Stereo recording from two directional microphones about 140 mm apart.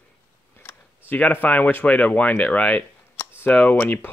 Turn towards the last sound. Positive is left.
turn(degrees=10)  # may be behind; listen again after turning